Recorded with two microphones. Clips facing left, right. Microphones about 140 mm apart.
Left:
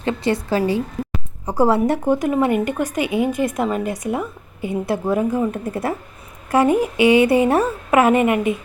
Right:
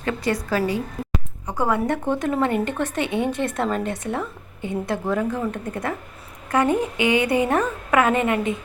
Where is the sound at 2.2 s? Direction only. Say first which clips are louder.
Left 4 dB; 15° left (ahead or behind).